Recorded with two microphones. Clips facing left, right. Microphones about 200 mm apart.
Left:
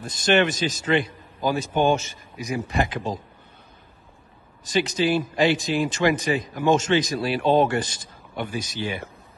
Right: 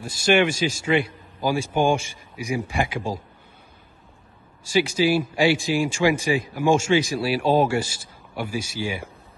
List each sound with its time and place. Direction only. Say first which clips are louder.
0.0 s speech: right 1 dB; 10° right (ahead or behind)
4.6 s speech: right 2 dB; 10° right (ahead or behind)